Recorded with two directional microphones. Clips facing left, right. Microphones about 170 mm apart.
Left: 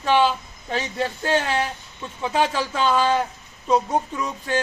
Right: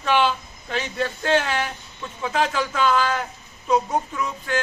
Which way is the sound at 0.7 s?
35° left (ahead or behind).